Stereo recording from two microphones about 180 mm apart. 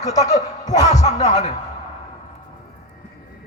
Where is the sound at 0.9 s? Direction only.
40° left (ahead or behind).